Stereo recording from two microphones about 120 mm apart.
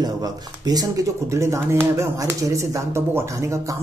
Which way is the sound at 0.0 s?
30° right (ahead or behind).